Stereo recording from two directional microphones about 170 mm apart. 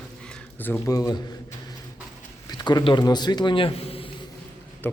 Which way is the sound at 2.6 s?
25° left (ahead or behind).